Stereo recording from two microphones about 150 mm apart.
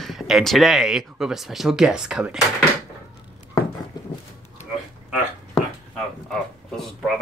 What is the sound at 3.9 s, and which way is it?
Horse, 25° left (ahead or behind).